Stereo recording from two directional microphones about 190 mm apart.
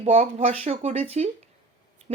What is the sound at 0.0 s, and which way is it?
Speech, 30° right (ahead or behind).